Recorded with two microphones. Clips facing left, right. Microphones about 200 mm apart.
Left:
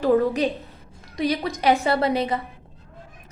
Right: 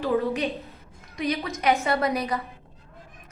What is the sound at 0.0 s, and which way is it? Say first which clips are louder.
A woman's voice: left 5 dB; 35° left (ahead or behind).